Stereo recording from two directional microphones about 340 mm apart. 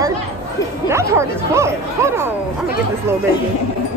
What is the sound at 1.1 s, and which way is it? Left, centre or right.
Speech, centre.